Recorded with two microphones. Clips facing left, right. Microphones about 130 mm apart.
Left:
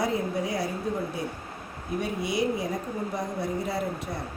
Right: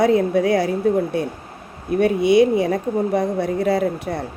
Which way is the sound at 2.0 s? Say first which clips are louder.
Right 14 dB; 75° right (ahead or behind).